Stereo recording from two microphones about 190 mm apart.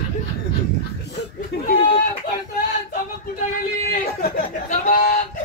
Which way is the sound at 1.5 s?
60° left (ahead or behind).